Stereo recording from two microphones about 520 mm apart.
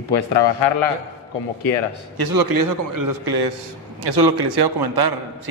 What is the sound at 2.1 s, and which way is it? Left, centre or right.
A man's voice, right.